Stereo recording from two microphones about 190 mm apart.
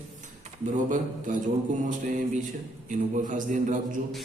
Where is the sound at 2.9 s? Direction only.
40° right (ahead or behind).